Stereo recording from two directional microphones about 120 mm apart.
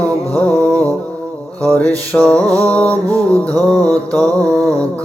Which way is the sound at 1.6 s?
10° left (ahead or behind).